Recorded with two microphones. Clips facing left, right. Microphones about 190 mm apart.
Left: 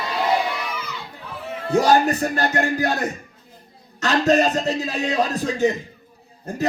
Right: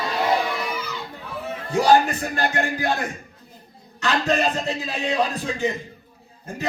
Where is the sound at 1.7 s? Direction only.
40° left (ahead or behind).